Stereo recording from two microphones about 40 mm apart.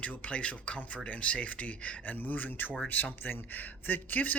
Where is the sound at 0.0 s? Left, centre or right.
Left.